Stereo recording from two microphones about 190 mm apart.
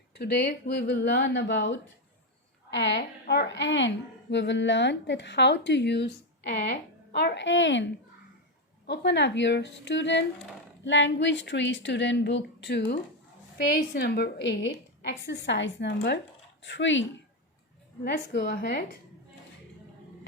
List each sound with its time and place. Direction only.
0.1 s a woman's voice: 60° left (ahead or behind)
8.9 s a woman's voice: 65° left (ahead or behind)
18.0 s a woman's voice: 65° left (ahead or behind)